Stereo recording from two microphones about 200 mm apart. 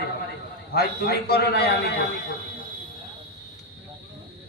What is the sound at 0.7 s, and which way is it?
Speech, 50° left (ahead or behind).